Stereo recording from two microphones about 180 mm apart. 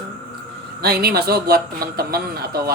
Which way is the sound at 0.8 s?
60° right (ahead or behind).